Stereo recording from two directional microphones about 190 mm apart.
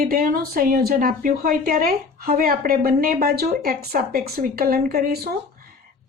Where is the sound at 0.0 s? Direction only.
50° right (ahead or behind).